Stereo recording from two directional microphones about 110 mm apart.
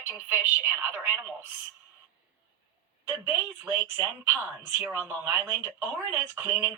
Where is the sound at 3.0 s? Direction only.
20° right (ahead or behind).